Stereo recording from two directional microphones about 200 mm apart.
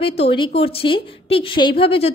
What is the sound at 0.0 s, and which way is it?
A woman's voice, 30° left (ahead or behind).